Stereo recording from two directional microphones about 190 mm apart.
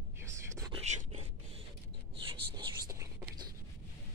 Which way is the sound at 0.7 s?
35° right (ahead or behind).